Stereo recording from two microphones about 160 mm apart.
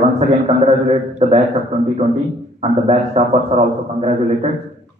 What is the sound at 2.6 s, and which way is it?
A man's voice, 40° right (ahead or behind).